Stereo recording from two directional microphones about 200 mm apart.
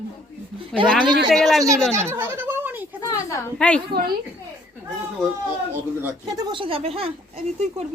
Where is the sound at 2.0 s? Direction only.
10° right (ahead or behind).